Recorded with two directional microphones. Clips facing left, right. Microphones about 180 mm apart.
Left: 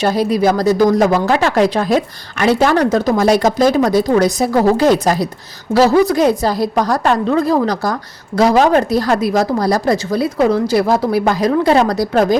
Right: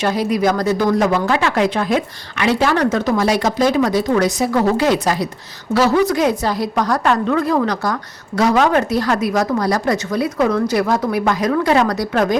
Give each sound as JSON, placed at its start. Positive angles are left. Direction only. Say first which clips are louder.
{"t": 0.0, "sound": "speech", "louder": "left 3 dB", "side_deg": 35}